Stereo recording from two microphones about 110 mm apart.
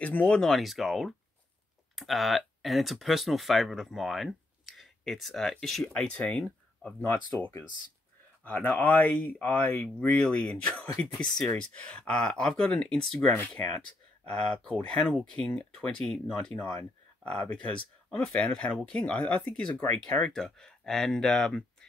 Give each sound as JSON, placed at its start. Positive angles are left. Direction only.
{"t": 0.0, "sound": "speech", "side_deg": 15}
{"t": 7.0, "sound": "speech", "side_deg": 20}
{"t": 16.0, "sound": "speech", "side_deg": 0}
{"t": 20.0, "sound": "speech", "side_deg": 5}